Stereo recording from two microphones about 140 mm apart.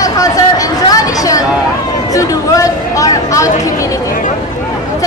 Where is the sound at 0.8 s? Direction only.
25° left (ahead or behind).